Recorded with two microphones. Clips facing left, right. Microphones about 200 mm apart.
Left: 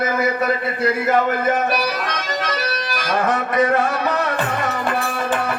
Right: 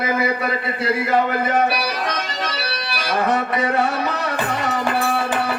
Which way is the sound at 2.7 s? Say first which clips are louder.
Left 2 dB; 50° left (ahead or behind).